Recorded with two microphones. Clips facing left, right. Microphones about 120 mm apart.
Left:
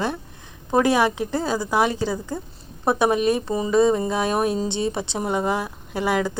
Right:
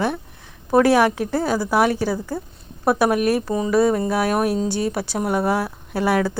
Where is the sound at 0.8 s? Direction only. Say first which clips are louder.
Right 3 dB; 15° left (ahead or behind).